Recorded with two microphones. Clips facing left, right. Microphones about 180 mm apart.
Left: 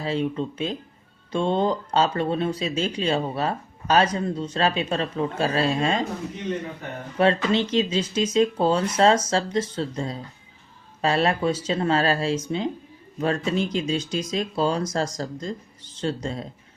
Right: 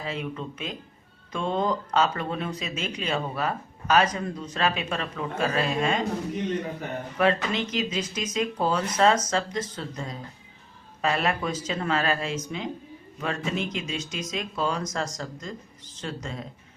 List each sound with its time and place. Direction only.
0.0 s speech: 30° left (ahead or behind)
7.2 s speech: 30° left (ahead or behind)